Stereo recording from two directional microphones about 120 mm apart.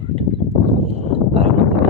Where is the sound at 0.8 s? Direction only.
55° right (ahead or behind).